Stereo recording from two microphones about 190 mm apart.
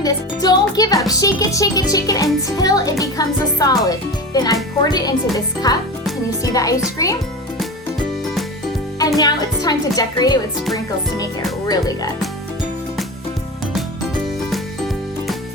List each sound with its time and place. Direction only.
0.0 s music: 20° left (ahead or behind)
1.0 s a child's voice: 20° left (ahead or behind)
9.0 s a child's voice: 20° left (ahead or behind)
11.7 s a child's voice: 20° left (ahead or behind)